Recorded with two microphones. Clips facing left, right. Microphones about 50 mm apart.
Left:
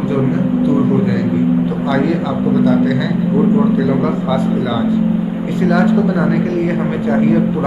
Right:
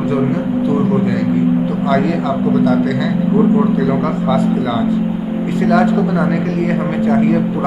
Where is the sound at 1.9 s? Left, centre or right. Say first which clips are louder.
Right 2 dB; centre.